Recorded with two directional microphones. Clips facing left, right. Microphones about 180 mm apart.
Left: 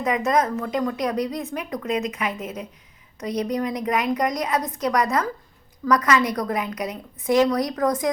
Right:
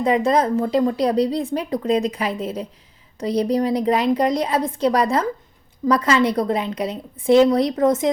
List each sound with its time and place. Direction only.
0.0 s a woman's voice: 30° right (ahead or behind)